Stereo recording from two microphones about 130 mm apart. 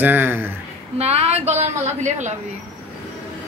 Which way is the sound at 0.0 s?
15° right (ahead or behind).